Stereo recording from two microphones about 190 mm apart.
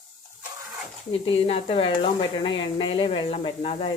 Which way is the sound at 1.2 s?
30° left (ahead or behind).